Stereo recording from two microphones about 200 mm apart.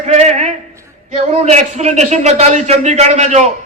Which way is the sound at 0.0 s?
35° right (ahead or behind).